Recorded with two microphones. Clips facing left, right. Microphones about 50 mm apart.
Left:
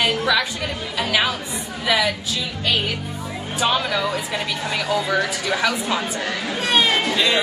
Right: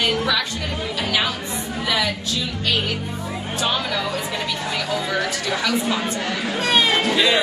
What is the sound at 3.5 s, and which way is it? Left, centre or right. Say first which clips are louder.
Speech: left 3 dB; centre.